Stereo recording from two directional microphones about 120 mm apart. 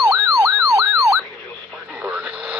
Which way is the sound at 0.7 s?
25° right (ahead or behind).